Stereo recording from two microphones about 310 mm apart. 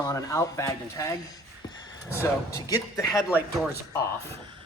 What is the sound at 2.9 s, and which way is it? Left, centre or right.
Speech, centre.